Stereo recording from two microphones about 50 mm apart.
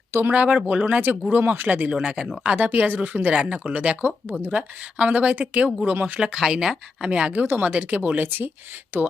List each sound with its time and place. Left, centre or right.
0.1 s speech: right
0.3 s speech: right
1.3 s speech: right
1.9 s speech: centre
2.6 s speech: right
3.3 s speech: centre
3.7 s speech: right
4.5 s speech: right
6.5 s speech: centre
7.3 s speech: right